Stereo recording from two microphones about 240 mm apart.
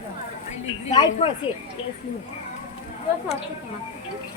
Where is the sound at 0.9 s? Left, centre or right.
Centre.